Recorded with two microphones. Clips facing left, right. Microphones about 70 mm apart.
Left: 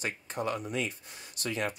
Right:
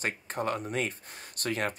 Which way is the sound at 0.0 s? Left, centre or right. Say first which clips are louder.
Right 2 dB; right.